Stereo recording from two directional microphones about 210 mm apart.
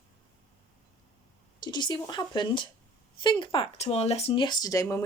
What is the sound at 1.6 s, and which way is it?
Speech, 20° left (ahead or behind).